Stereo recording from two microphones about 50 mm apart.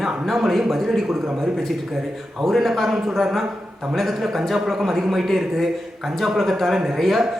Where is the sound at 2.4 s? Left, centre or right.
Centre.